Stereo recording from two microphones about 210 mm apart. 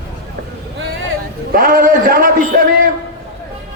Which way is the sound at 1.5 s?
45° right (ahead or behind).